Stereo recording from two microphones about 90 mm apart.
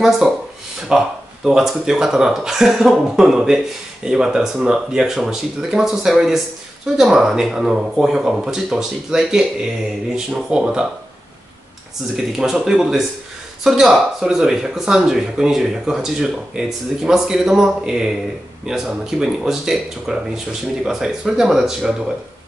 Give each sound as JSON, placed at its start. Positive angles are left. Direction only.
{"t": 0.2, "sound": "speech", "side_deg": -5}
{"t": 12.2, "sound": "speech", "side_deg": -5}